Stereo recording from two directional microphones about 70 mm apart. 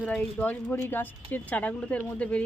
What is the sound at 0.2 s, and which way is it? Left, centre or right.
Speech, left.